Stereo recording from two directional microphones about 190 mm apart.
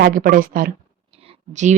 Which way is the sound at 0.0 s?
45° right (ahead or behind).